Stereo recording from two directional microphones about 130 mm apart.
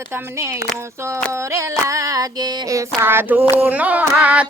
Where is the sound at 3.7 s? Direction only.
10° right (ahead or behind).